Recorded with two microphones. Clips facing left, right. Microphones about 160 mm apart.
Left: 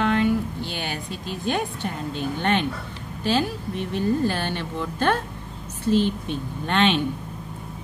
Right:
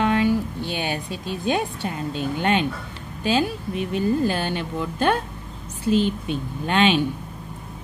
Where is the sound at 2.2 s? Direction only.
15° right (ahead or behind).